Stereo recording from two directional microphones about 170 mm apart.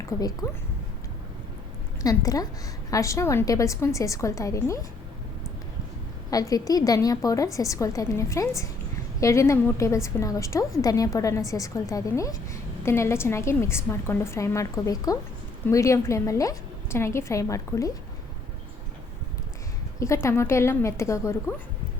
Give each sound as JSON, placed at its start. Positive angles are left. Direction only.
{"t": 0.2, "sound": "a woman's voice", "side_deg": 20}
{"t": 2.0, "sound": "a woman's voice", "side_deg": 20}
{"t": 6.3, "sound": "a woman's voice", "side_deg": 20}
{"t": 20.0, "sound": "a woman's voice", "side_deg": 15}